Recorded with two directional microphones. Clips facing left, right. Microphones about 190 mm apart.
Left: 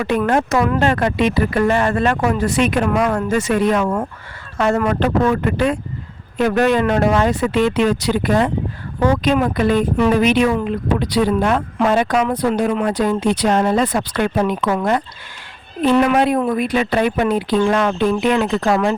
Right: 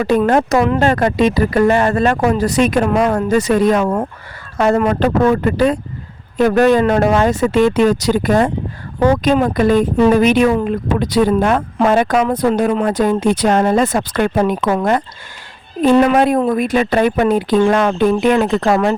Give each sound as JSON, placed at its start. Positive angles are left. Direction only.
{"t": 0.3, "sound": "speech", "side_deg": -40}
{"t": 2.9, "sound": "speech", "side_deg": -25}